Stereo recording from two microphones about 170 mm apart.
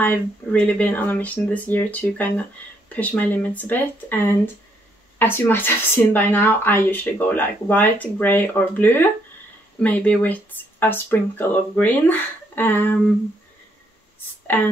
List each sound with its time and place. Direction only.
0.0 s speech: 10° left (ahead or behind)
14.5 s speech: 10° left (ahead or behind)